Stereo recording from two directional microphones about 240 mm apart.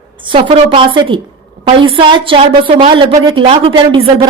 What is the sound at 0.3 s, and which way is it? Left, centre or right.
A woman's voice, right.